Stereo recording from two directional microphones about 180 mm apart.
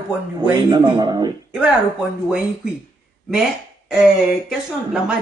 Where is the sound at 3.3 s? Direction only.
Centre (ahead or behind).